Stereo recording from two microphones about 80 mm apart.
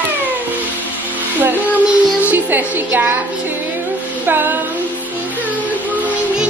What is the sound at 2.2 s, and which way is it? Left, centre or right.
Music, right.